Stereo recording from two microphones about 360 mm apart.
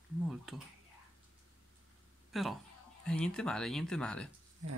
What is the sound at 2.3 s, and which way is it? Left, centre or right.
Speech, centre.